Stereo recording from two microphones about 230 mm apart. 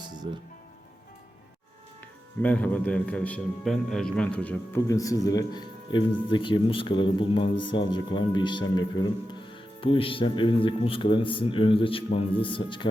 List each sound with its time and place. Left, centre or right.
0.2 s speech: right
2.4 s a man's voice: centre; by 12.9 s left